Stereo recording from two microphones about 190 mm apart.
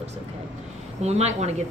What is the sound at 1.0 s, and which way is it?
Speech, 35° right (ahead or behind).